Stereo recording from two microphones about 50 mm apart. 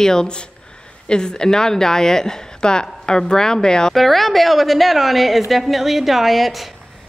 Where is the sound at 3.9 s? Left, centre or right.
Centre.